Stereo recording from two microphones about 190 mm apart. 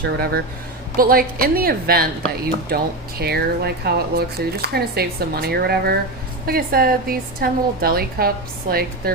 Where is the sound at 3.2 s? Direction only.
55° right (ahead or behind).